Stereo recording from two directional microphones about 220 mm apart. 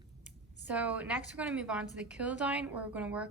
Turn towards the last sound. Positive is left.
turn(degrees=-5)  # may be behind; listen again after turning